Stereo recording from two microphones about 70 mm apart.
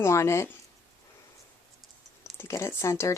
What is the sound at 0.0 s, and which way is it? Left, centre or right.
Speech, left.